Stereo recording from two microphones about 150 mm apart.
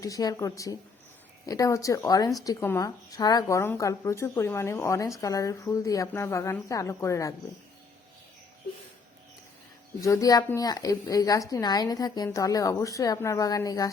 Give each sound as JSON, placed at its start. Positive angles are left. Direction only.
{"t": 0.0, "sound": "speech", "side_deg": 25}
{"t": 10.0, "sound": "speech", "side_deg": 20}